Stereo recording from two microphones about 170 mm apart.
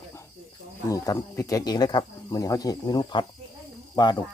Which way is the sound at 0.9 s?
20° left (ahead or behind).